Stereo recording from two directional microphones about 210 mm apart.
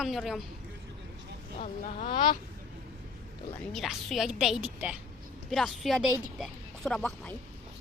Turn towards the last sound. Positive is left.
turn(degrees=5)  # may be behind; listen again after turning